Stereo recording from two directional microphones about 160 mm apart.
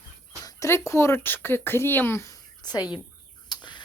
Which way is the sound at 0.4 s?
15° left (ahead or behind).